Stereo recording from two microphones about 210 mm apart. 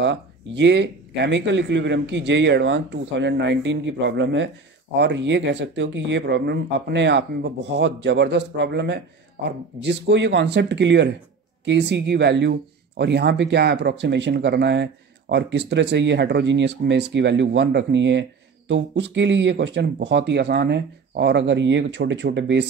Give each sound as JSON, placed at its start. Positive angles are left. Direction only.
{"t": 0.0, "sound": "speech", "side_deg": -60}